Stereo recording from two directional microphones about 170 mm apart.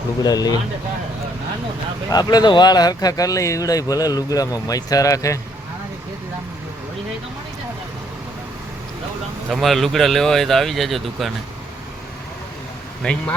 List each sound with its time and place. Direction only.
0.2 s speech: 25° left (ahead or behind)
2.0 s speech: 25° left (ahead or behind)
9.5 s speech: centre (ahead or behind)
13.0 s speech: 5° left (ahead or behind)